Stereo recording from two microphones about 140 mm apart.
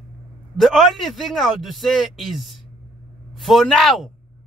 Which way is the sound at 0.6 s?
Centre (ahead or behind).